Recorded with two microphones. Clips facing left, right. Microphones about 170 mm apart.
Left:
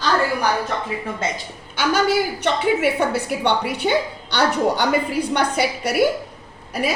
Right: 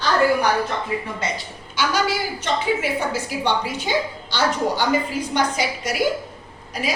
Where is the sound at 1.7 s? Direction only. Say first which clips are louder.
Left 4 dB; 50° left (ahead or behind).